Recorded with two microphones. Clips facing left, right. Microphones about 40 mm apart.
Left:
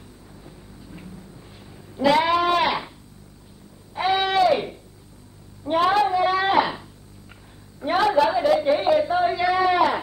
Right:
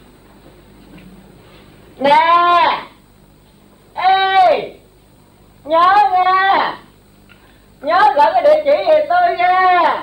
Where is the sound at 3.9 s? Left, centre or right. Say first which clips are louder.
Right 9 dB; right.